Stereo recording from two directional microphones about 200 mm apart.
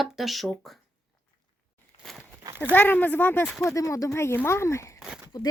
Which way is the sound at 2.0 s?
Centre (ahead or behind).